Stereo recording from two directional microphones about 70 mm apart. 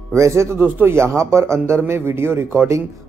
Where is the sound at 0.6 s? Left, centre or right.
Right.